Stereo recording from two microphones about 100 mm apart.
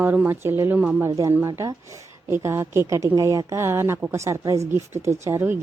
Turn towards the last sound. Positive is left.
turn(degrees=-25)  # may be behind; listen again after turning